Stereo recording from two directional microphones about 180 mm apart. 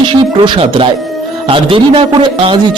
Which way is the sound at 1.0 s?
Centre (ahead or behind).